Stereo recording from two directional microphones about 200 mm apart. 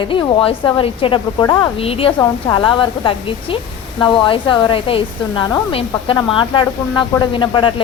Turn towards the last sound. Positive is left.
turn(degrees=25)  # may be behind; listen again after turning